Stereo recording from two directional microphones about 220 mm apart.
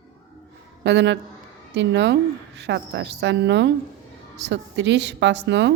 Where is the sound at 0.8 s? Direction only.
55° right (ahead or behind).